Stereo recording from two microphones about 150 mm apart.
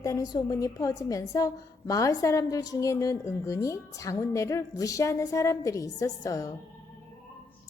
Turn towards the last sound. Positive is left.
turn(degrees=25)  # may be behind; listen again after turning